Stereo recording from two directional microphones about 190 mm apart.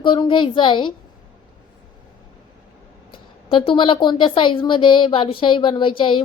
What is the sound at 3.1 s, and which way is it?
A woman's voice, 25° left (ahead or behind).